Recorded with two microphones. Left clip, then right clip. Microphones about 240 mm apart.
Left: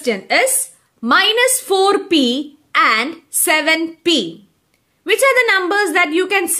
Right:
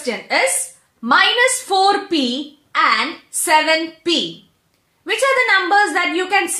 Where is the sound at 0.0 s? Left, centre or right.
Left.